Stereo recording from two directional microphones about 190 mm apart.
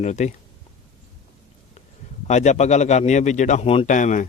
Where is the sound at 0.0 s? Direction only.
35° left (ahead or behind).